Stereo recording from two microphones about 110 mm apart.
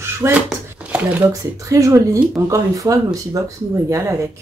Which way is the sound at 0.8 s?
15° right (ahead or behind).